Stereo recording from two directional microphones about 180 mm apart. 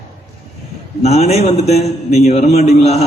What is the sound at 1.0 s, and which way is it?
A man's voice, 35° left (ahead or behind).